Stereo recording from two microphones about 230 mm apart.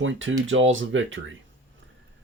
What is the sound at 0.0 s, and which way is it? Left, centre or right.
Speech, right.